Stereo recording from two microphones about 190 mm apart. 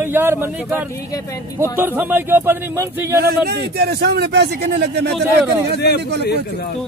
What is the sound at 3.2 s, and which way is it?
Speech, 55° right (ahead or behind).